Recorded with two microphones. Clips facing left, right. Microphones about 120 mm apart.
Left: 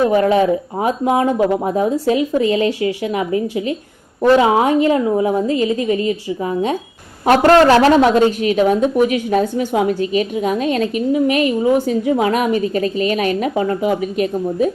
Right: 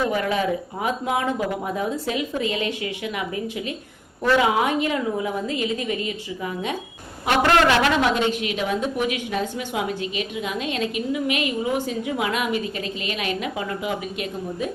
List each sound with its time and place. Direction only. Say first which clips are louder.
0.0 s a woman's voice: left 9 dB; 30° left (ahead or behind)